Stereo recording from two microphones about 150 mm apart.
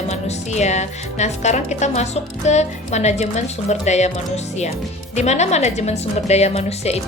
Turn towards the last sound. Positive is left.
turn(degrees=45)  # may be behind; listen again after turning